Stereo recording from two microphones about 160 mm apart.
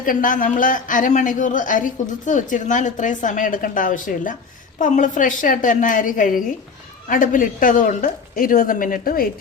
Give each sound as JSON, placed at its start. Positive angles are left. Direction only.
{"t": 0.0, "sound": "speech", "side_deg": 60}